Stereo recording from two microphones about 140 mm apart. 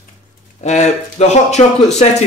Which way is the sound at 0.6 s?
55° left (ahead or behind).